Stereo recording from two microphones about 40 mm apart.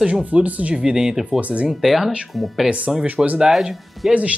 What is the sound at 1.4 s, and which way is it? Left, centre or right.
Speech, right.